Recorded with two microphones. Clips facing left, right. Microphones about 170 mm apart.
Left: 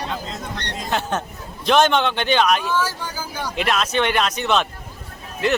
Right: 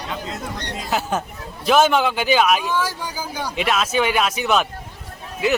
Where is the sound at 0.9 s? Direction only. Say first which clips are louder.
Right 1 dB; 5° right (ahead or behind).